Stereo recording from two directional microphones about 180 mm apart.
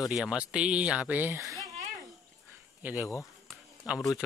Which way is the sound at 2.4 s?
10° right (ahead or behind).